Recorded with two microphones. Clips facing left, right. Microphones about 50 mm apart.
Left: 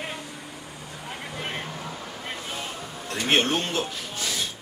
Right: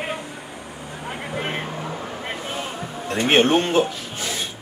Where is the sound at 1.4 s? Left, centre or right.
Right.